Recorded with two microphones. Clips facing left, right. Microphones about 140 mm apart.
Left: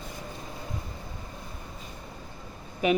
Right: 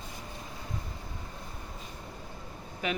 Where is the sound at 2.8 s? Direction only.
15° left (ahead or behind).